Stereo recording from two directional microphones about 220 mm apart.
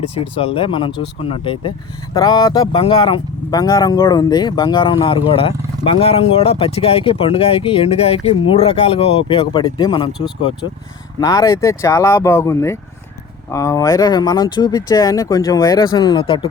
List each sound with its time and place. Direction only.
0.3 s speech: 25° left (ahead or behind)
11.2 s speech: 15° left (ahead or behind)